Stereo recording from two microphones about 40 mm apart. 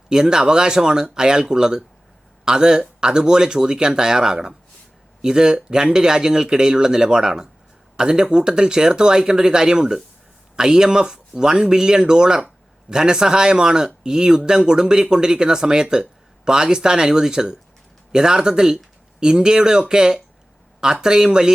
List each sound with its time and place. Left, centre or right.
0.1 s speech: centre